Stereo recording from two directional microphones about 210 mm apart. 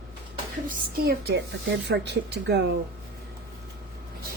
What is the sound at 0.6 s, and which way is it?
Speech, 45° right (ahead or behind).